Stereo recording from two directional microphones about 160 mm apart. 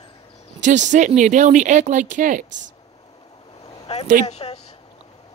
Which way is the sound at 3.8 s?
40° left (ahead or behind).